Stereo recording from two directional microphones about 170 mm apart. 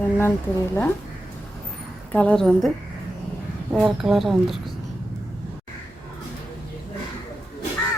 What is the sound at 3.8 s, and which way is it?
Speech, centre (ahead or behind).